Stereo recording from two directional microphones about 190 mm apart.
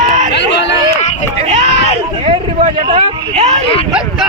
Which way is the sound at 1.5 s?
35° right (ahead or behind).